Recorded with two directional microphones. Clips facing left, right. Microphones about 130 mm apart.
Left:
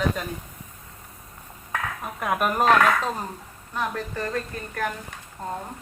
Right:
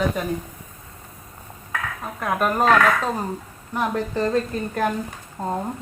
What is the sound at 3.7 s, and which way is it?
A woman's voice, 20° right (ahead or behind).